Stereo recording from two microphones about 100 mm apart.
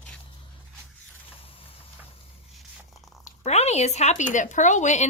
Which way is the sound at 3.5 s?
90° left.